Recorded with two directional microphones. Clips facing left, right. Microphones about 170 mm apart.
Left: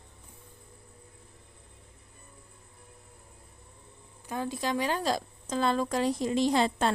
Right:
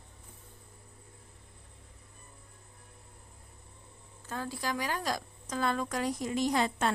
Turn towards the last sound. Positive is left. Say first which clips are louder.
# left 3 dB
turn(degrees=30)  # may be behind; listen again after turning